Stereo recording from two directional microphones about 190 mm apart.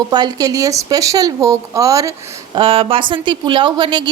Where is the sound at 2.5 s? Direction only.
30° right (ahead or behind).